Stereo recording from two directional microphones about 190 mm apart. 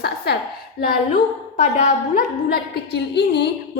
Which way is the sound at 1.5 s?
40° left (ahead or behind).